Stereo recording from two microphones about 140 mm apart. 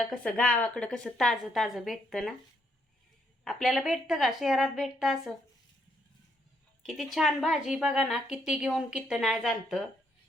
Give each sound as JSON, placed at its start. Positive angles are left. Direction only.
{"t": 0.0, "sound": "a woman's voice", "side_deg": 10}
{"t": 3.4, "sound": "a woman's voice", "side_deg": 5}
{"t": 6.8, "sound": "a woman's voice", "side_deg": 0}